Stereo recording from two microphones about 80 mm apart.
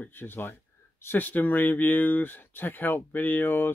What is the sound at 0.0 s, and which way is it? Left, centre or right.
Speech, left.